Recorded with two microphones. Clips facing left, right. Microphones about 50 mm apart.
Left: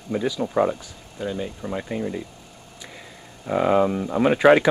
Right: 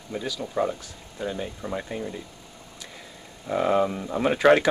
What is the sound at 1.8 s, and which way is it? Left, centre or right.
Speech, centre.